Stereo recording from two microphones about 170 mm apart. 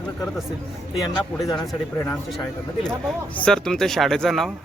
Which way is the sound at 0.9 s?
Centre (ahead or behind).